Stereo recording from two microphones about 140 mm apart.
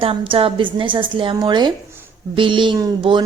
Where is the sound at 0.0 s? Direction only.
40° right (ahead or behind).